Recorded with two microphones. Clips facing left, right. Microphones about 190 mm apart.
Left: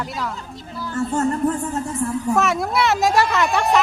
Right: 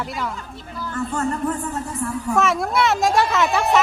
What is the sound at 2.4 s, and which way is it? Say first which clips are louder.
Speech: right 3 dB; centre (ahead or behind).